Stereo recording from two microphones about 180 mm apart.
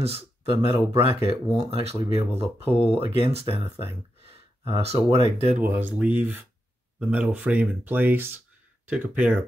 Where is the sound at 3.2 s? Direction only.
30° right (ahead or behind).